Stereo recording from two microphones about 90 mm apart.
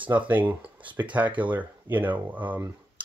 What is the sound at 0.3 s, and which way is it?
Speech, 20° right (ahead or behind).